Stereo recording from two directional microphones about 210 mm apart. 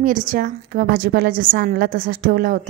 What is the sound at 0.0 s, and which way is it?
A woman's voice, 40° right (ahead or behind).